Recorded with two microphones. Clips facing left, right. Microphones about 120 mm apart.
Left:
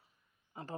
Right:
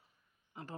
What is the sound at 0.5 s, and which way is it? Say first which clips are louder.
Speech: left 3 dB; 30° left (ahead or behind).